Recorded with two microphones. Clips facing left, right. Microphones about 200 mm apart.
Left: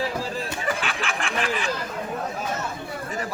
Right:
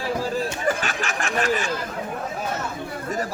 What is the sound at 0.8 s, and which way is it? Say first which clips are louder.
Snicker: right 1 dB; 45° right (ahead or behind).